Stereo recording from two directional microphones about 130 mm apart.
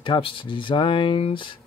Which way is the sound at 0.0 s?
40° left (ahead or behind).